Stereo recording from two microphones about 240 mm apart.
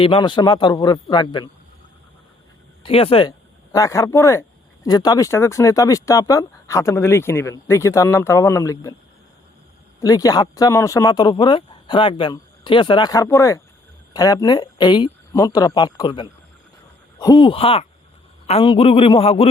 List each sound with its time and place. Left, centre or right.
0.0 s speech: centre
2.8 s speech: left
10.0 s a man's voice: centre